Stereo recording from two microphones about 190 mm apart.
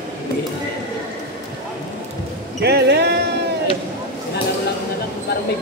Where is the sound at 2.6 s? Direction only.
60° right (ahead or behind).